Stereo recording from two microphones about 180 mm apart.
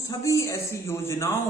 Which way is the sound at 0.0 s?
20° left (ahead or behind).